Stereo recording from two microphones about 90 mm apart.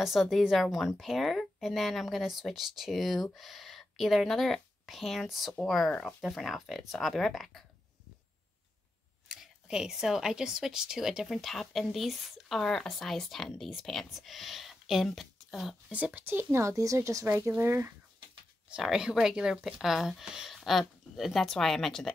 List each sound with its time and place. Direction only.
0.0 s a woman's voice: centre (ahead or behind)
9.3 s a woman's voice: 10° right (ahead or behind)
15.9 s speech: 15° right (ahead or behind)
18.7 s a woman's voice: 5° right (ahead or behind)